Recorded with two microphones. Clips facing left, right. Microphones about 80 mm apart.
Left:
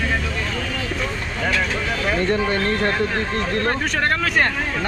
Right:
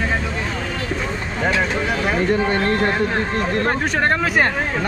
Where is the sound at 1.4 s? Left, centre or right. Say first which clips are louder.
Right 3 dB; right.